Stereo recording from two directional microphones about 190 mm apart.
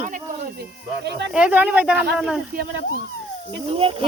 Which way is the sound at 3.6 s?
30° right (ahead or behind).